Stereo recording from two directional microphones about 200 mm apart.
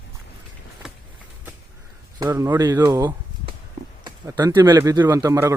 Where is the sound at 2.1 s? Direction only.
15° right (ahead or behind).